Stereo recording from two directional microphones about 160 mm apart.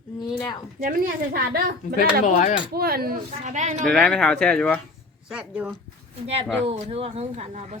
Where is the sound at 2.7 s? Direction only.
75° right (ahead or behind).